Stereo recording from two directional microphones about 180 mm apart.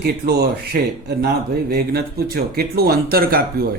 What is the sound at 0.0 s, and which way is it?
Speech, 60° right (ahead or behind).